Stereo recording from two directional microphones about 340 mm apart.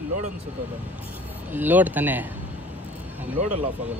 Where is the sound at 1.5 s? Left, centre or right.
Centre.